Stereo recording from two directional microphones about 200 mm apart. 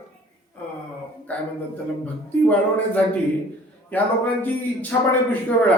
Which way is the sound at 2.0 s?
10° left (ahead or behind).